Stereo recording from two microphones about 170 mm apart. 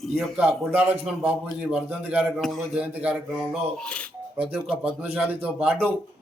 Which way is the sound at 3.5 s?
5° left (ahead or behind).